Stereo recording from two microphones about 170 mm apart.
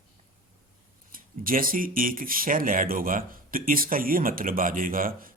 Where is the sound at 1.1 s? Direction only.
55° right (ahead or behind).